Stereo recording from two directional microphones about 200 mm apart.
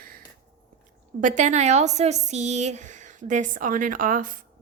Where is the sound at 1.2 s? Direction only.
35° right (ahead or behind).